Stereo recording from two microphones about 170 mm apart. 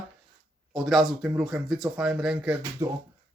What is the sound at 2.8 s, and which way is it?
Speech, 30° right (ahead or behind).